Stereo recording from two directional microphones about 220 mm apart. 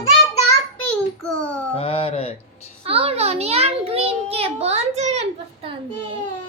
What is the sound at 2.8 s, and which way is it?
Child singing, 25° right (ahead or behind).